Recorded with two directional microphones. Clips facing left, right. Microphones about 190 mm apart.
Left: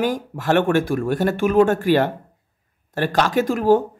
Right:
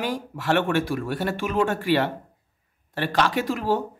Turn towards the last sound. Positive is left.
turn(degrees=45)  # may be behind; listen again after turning